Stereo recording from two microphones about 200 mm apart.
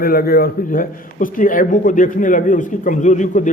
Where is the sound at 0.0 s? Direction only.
50° left (ahead or behind).